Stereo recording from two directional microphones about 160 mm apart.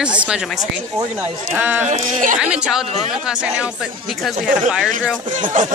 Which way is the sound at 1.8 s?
50° right (ahead or behind).